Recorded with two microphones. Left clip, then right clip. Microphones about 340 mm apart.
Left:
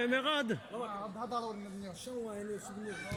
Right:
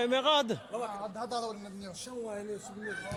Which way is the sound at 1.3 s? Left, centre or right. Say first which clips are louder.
Right 2 dB; right.